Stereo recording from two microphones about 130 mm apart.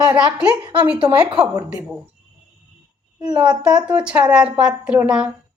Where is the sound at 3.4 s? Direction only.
35° right (ahead or behind).